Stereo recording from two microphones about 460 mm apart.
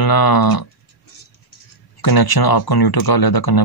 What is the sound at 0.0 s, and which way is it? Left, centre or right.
Speech, left.